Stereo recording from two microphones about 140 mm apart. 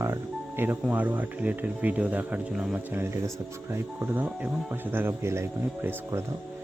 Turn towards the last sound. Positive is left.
turn(degrees=-20)  # may be behind; listen again after turning